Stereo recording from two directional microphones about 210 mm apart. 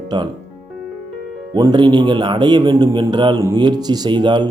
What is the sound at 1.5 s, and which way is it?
Speech, 20° right (ahead or behind).